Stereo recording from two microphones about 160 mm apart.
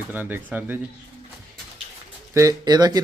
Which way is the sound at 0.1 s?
10° right (ahead or behind).